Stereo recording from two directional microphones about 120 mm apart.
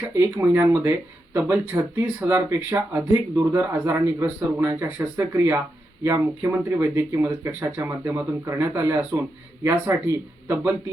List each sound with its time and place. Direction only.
0.1 s a man's voice: 20° right (ahead or behind)